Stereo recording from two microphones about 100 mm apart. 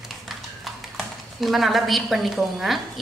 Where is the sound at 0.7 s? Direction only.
Centre (ahead or behind).